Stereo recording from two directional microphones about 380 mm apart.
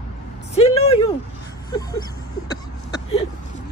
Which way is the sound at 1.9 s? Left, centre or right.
Centre.